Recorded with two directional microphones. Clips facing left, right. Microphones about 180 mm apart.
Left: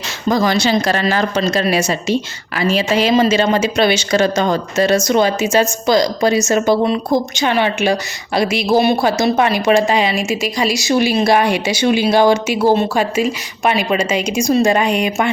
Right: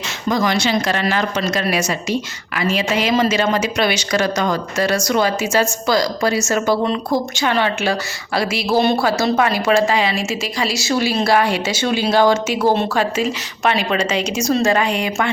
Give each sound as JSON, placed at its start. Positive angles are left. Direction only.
{"t": 0.3, "sound": "a woman's voice", "side_deg": 35}